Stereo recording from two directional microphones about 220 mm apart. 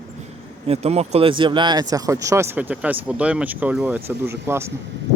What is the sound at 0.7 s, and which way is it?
Speech, 30° right (ahead or behind).